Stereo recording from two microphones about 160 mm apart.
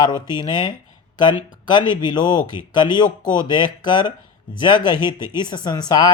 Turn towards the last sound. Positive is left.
turn(degrees=25)  # may be behind; listen again after turning